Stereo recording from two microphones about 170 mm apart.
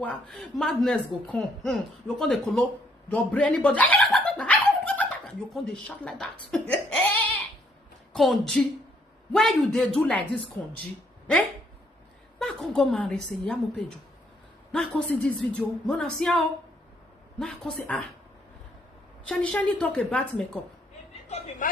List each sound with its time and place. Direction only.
0.0 s speech: 5° left (ahead or behind)
3.1 s dog: 10° left (ahead or behind)
8.1 s speech: centre (ahead or behind)
12.4 s speech: centre (ahead or behind)
19.3 s speech: 5° left (ahead or behind)
21.6 s speech: 50° left (ahead or behind)